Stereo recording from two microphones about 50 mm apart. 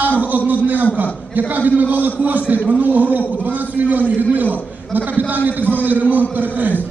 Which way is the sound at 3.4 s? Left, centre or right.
Right.